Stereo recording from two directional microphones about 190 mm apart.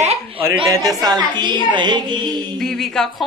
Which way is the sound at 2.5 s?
Centre (ahead or behind).